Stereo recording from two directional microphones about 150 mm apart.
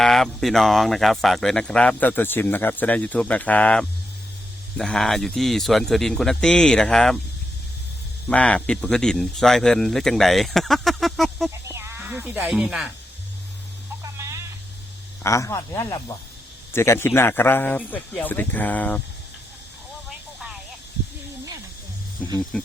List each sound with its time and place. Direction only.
0.0 s speech: 5° left (ahead or behind)
8.3 s speech: 10° left (ahead or behind)
11.5 s speech: 20° right (ahead or behind); by 12.9 s 5° right (ahead or behind)
14.0 s a sound: 20° right (ahead or behind)
15.2 s speech: 20° left (ahead or behind)
20.1 s vehicle: 5° right (ahead or behind)
22.5 s a sound: 5° left (ahead or behind)